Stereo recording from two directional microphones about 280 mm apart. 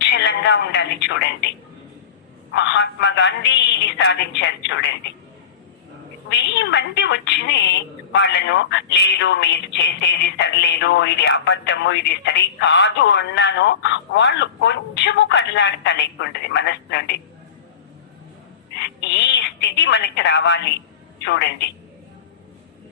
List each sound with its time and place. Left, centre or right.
0.0 s a woman's voice: left
6.3 s a woman's voice: left
18.8 s a woman's voice: left